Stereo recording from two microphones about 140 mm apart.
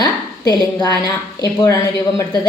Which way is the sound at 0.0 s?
25° left (ahead or behind).